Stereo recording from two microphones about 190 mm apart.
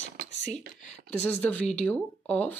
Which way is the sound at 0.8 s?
40° left (ahead or behind).